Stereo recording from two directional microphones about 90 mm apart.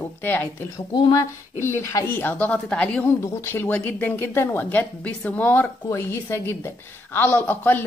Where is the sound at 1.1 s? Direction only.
35° left (ahead or behind); by 3.1 s 10° left (ahead or behind).